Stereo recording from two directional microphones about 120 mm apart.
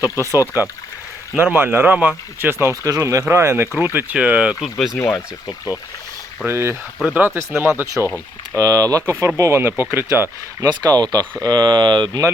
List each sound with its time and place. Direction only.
1.4 s speech: 15° right (ahead or behind)
4.9 s speech: 20° left (ahead or behind)
6.4 s speech: 20° right (ahead or behind)
10.7 s speech: 35° right (ahead or behind)